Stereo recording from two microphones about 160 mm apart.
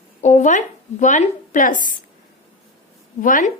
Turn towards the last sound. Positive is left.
turn(degrees=55)  # may be behind; listen again after turning